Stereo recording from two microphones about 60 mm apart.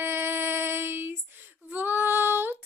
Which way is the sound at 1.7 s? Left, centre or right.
Right.